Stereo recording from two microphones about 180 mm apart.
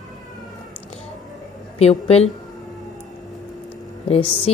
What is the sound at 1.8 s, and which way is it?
Speech, 35° left (ahead or behind).